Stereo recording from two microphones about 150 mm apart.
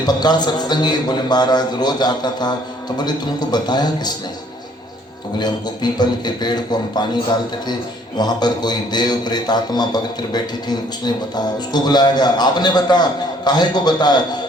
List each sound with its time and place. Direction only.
0.0 s a man's voice: 30° left (ahead or behind)
5.4 s a man's voice: 30° left (ahead or behind)
8.2 s a man's voice: 30° left (ahead or behind)